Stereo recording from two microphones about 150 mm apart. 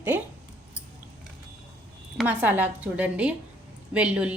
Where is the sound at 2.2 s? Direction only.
10° right (ahead or behind).